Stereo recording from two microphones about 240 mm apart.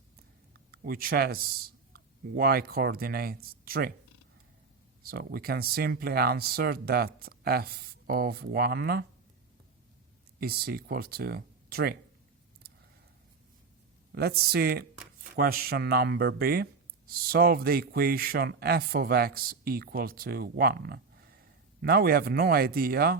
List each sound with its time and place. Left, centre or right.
0.7 s speech: right
5.0 s speech: right
10.4 s speech: right
14.2 s speech: right